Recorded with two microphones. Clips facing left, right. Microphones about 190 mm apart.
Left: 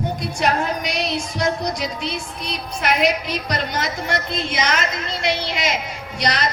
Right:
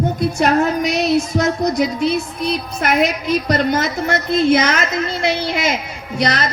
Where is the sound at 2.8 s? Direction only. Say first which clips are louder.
Right 1 dB; 50° right (ahead or behind).